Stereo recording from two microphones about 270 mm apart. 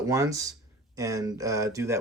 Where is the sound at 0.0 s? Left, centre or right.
Centre.